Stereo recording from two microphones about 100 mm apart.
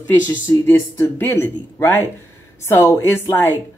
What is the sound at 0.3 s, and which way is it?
Speech, 20° left (ahead or behind).